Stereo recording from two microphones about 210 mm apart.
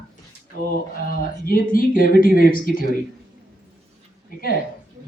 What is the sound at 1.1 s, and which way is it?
Speech, 45° left (ahead or behind).